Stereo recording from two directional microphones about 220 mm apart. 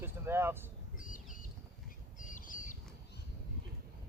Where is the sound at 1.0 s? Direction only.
35° left (ahead or behind).